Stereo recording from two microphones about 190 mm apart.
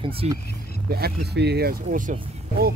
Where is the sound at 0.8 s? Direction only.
55° right (ahead or behind).